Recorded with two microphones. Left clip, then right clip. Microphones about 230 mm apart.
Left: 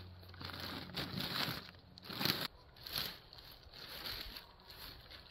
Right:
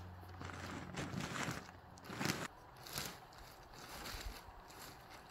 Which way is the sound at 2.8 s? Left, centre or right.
Centre.